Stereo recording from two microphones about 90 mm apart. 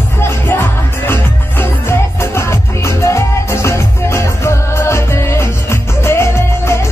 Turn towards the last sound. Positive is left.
turn(degrees=30)  # may be behind; listen again after turning